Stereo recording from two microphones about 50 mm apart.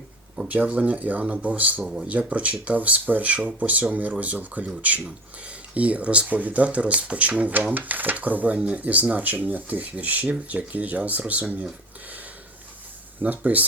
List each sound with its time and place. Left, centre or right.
0.4 s speech: right
1.8 s speech: centre
2.0 s speech: right
8.5 s speech: right
13.2 s speech: right